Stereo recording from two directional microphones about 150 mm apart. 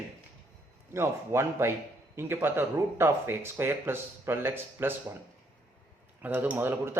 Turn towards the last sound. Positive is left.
turn(degrees=-15)  # may be behind; listen again after turning